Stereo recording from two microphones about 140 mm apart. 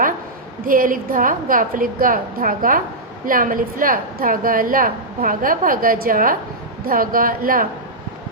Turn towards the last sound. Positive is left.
turn(degrees=-90)